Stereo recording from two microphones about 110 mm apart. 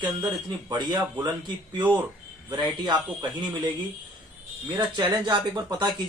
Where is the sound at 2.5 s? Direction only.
45° right (ahead or behind).